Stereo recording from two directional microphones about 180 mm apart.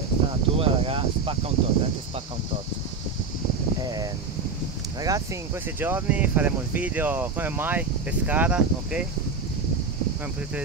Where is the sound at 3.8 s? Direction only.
20° right (ahead or behind).